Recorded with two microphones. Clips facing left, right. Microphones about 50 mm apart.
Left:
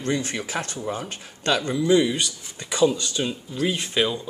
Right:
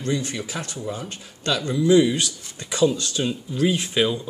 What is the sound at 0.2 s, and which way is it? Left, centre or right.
Speech, left.